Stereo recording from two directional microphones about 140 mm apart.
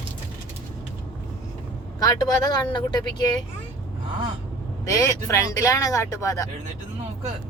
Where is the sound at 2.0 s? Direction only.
30° left (ahead or behind).